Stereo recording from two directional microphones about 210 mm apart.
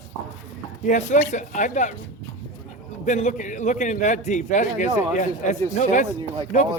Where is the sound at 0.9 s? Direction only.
35° left (ahead or behind).